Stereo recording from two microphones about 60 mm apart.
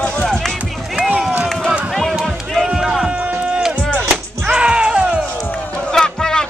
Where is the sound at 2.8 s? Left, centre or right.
Centre.